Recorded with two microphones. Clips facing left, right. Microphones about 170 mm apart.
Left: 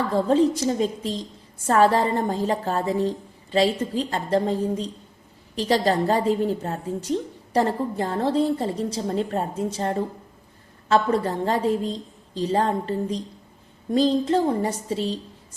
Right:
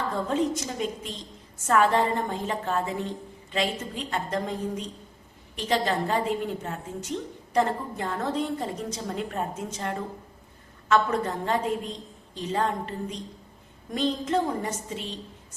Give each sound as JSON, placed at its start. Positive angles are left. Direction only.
{"t": 0.1, "sound": "a woman's voice", "side_deg": 35}